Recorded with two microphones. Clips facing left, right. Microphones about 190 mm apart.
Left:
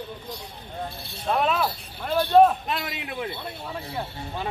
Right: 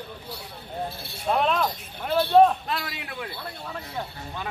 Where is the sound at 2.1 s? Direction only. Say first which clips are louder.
Even; 15° left (ahead or behind).